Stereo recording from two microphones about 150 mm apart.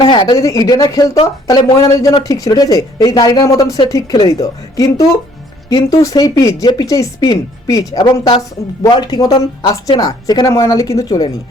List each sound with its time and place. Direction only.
0.0 s speech: 30° left (ahead or behind)